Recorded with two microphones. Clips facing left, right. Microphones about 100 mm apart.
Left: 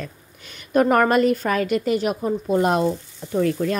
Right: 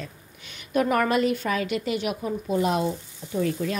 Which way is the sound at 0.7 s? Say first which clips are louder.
Left 5 dB; 45° left (ahead or behind).